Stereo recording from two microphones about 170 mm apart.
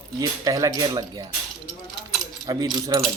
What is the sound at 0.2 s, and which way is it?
Speech, 20° right (ahead or behind).